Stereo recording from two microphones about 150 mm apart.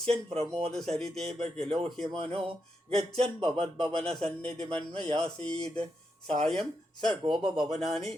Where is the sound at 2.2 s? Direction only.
45° right (ahead or behind).